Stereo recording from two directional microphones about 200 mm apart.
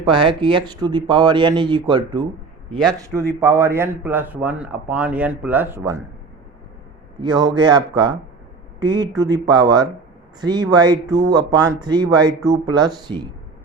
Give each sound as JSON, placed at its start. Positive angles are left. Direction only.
{"t": 0.0, "sound": "a man's voice", "side_deg": -25}
{"t": 7.2, "sound": "speech", "side_deg": -20}